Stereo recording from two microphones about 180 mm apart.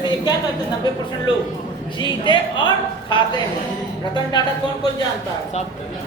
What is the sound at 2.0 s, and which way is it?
Speech, 25° left (ahead or behind).